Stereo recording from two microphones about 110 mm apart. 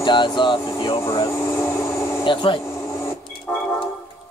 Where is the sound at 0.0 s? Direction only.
45° left (ahead or behind).